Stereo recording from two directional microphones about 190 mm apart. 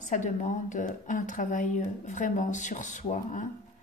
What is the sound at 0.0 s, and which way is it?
A woman's voice, 40° left (ahead or behind).